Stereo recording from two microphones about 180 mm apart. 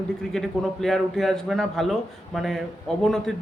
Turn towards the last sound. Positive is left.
turn(degrees=0)  # may be behind; listen again after turning